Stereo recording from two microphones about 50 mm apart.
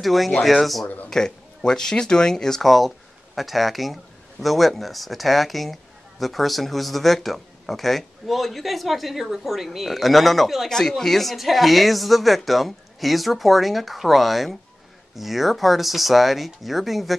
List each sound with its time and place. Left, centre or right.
0.0 s speech: centre
1.1 s speech: centre